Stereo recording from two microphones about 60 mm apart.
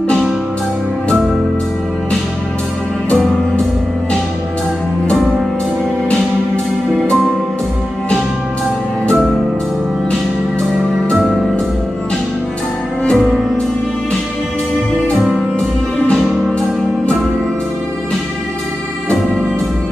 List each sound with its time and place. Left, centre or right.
13.0 s music: centre